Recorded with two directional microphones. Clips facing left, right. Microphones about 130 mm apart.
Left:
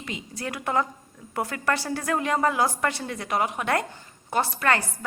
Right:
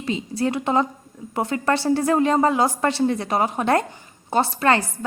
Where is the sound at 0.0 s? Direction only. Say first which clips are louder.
Right 10 dB; 30° right (ahead or behind).